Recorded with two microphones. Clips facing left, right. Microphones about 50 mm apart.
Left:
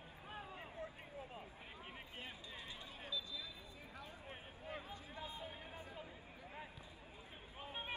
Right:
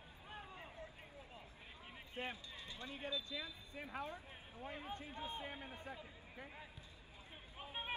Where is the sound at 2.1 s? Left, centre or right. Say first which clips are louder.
Right 9 dB; right.